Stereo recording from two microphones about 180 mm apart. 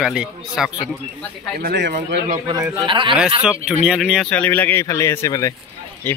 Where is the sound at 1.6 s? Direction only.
65° right (ahead or behind).